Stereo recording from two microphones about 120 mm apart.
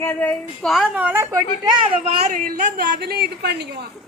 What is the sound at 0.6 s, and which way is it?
Speech, centre (ahead or behind).